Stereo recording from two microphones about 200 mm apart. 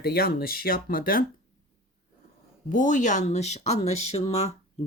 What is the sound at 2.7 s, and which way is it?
Speech, 40° left (ahead or behind).